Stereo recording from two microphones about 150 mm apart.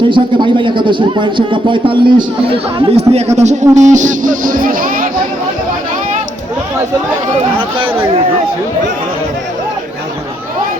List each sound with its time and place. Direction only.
0.1 s a man's voice: 35° right (ahead or behind); by 5.0 s 65° right (ahead or behind)